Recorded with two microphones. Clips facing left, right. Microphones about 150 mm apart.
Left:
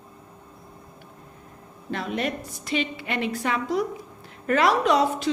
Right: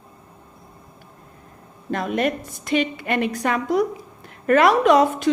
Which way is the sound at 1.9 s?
50° right (ahead or behind).